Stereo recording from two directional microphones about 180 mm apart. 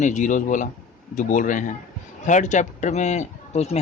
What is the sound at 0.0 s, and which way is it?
A man's voice, 45° left (ahead or behind).